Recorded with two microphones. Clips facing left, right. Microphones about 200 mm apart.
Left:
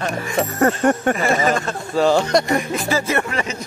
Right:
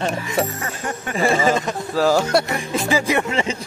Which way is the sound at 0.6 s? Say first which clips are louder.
Left 12 dB; 70° left (ahead or behind).